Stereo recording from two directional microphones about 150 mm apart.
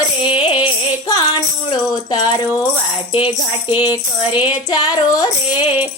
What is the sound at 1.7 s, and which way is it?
Speech, 25° left (ahead or behind).